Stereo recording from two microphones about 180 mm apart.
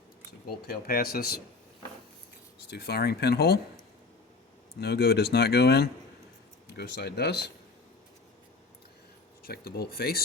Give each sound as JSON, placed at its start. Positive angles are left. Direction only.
{"t": 0.4, "sound": "speech", "side_deg": 55}
{"t": 2.6, "sound": "speech", "side_deg": 65}
{"t": 4.8, "sound": "speech", "side_deg": 60}
{"t": 9.4, "sound": "speech", "side_deg": 55}